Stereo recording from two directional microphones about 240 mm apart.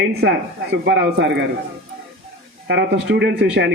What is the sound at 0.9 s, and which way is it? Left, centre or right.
Speech, right.